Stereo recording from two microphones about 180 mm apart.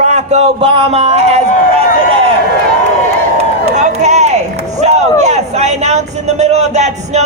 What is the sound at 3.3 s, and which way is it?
Speech, 40° right (ahead or behind).